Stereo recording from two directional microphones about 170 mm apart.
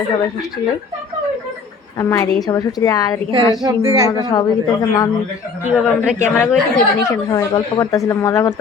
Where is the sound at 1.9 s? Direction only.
20° left (ahead or behind).